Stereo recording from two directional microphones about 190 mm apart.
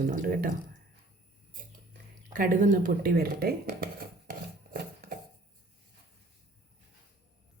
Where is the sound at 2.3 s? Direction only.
45° right (ahead or behind).